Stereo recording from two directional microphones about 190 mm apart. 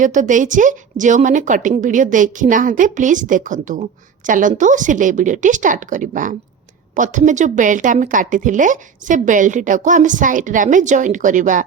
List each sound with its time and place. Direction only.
0.0 s a woman's voice: 40° right (ahead or behind)